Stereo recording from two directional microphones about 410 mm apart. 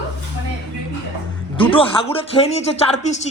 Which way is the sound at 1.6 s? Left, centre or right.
Centre.